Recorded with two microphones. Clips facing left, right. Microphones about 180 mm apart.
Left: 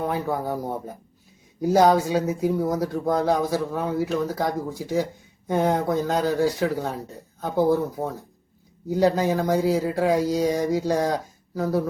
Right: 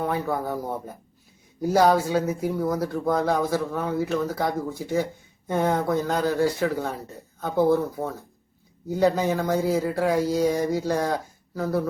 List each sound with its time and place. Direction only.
0.0 s speech: 15° left (ahead or behind)
1.6 s speech: 20° left (ahead or behind)